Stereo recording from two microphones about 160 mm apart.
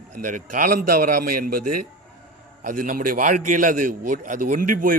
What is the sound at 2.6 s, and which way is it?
A man's voice, 60° right (ahead or behind).